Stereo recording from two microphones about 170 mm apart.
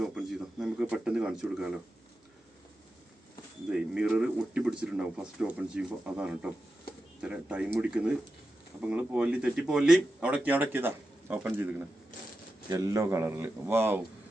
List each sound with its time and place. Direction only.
0.0 s speech: 5° right (ahead or behind)
3.7 s a man's voice: 5° right (ahead or behind)